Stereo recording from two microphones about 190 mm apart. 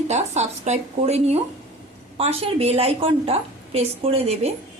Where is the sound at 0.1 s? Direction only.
35° right (ahead or behind).